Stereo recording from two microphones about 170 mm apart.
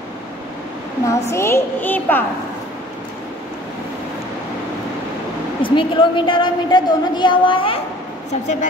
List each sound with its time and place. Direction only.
1.3 s a woman's voice: 15° left (ahead or behind)
5.6 s a woman's voice: 30° left (ahead or behind)
8.3 s a woman's voice: 45° left (ahead or behind)